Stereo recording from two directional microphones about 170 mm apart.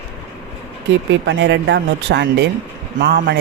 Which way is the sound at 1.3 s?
90° right.